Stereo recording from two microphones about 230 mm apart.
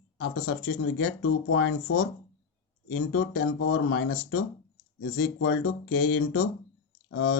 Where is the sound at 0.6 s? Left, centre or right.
Left.